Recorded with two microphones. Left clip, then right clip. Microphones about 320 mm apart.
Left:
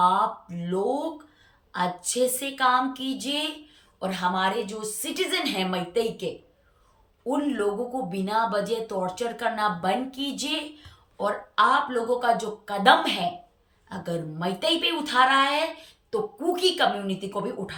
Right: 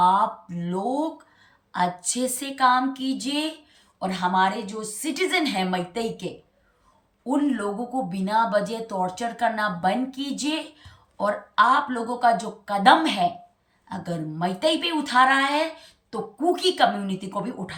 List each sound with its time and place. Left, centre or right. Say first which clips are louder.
0.0 s a sound: right 2 dB; centre
1.7 s speech: right 2 dB; centre
8.1 s speech: right 3 dB; centre